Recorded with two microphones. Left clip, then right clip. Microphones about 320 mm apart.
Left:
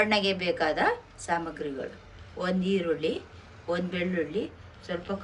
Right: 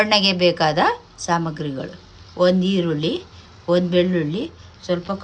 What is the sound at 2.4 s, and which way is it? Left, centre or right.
Speech, centre.